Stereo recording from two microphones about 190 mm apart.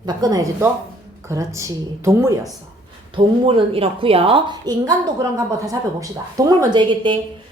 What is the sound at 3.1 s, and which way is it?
A woman's voice, 25° right (ahead or behind).